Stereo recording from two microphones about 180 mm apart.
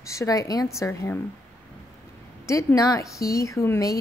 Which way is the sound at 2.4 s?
20° left (ahead or behind).